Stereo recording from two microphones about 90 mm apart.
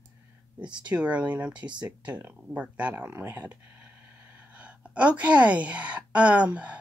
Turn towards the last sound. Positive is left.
turn(degrees=-15)  # may be behind; listen again after turning